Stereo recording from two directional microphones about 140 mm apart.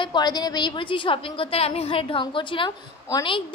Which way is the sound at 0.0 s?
30° left (ahead or behind).